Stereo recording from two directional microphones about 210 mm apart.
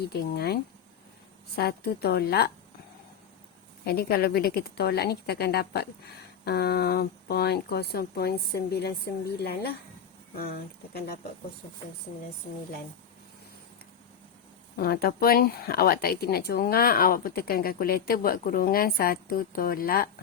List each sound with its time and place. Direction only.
0.1 s speech: 50° left (ahead or behind)
3.8 s speech: 45° left (ahead or behind)
14.8 s speech: 45° left (ahead or behind)